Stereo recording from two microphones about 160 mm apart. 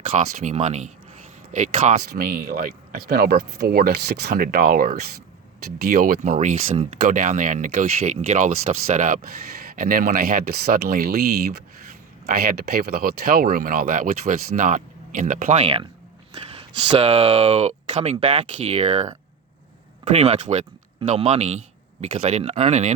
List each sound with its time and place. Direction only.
0.1 s speech: 45° right (ahead or behind); by 2.6 s 60° right (ahead or behind)
3.1 s speech: 80° right; by 19.0 s 40° right (ahead or behind)
20.1 s speech: 45° right (ahead or behind)